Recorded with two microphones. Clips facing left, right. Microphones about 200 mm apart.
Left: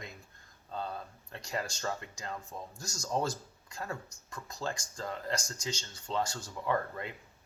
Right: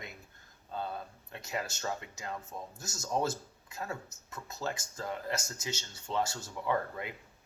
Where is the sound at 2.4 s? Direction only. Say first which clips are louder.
Even; 25° right (ahead or behind).